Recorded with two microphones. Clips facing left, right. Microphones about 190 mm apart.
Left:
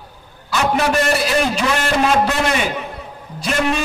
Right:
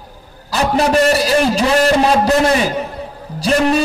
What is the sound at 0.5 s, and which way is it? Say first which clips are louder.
A man's voice: right 3 dB; 35° right (ahead or behind).